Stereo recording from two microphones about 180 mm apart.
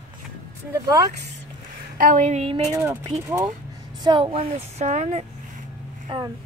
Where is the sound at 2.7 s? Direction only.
20° right (ahead or behind).